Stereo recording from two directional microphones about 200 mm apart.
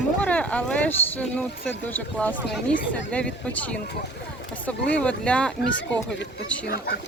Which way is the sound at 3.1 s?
5° left (ahead or behind).